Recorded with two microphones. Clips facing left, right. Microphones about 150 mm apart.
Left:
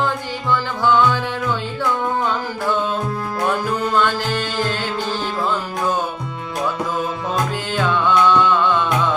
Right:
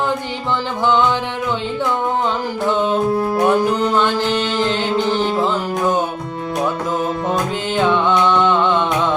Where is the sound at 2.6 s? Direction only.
20° right (ahead or behind).